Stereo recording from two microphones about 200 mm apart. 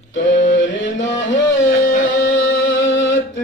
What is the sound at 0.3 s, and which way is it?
Mantra, 40° left (ahead or behind).